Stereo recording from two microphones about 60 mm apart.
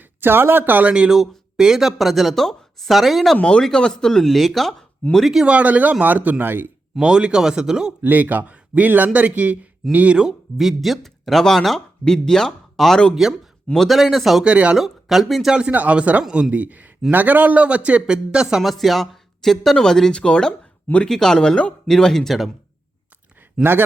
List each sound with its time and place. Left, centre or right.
0.2 s speech: right
1.1 s speech: centre
3.3 s speech: centre
5.5 s a man's voice: right
7.0 s speech: centre
8.0 s a man's voice: right
10.2 s speech: centre
13.2 s speech: centre
14.4 s a man's voice: centre
14.8 s speech: centre
15.7 s a man's voice: right
18.6 s speech: centre
23.6 s speech: centre